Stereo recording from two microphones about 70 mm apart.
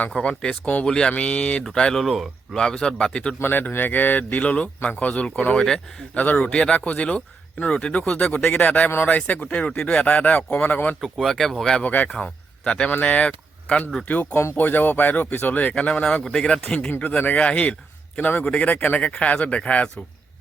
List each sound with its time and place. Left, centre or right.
0.1 s speech: centre
2.6 s speech: centre
3.4 s speech: left
11.0 s speech: centre
11.8 s speech: left
12.0 s speech: centre; by 15.7 s left
15.7 s speech: centre
16.9 s speech: left